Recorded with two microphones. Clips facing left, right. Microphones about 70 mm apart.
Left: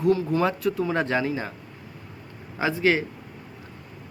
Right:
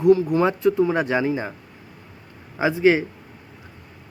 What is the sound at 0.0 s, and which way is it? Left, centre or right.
Speech, centre.